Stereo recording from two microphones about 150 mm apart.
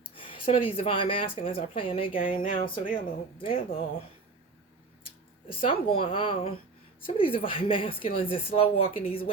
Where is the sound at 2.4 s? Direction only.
65° left (ahead or behind).